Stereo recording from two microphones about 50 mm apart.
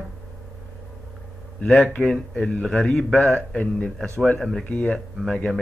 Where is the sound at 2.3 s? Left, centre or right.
Left.